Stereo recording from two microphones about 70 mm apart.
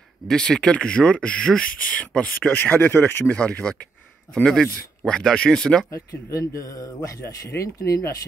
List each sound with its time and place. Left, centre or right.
0.3 s speech: centre
5.9 s a man's voice: left